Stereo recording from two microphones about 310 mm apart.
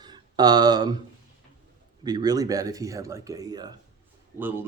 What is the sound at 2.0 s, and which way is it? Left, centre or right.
A man's voice, centre.